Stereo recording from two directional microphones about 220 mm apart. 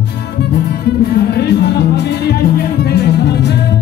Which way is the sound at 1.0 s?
45° left (ahead or behind).